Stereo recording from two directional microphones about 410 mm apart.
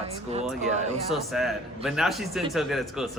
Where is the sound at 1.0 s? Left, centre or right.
Centre.